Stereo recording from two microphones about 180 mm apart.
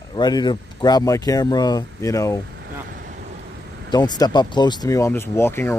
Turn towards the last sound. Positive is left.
turn(degrees=15)  # may be behind; listen again after turning